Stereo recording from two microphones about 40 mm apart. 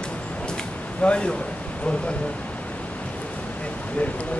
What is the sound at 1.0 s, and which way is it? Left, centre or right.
Speech, left.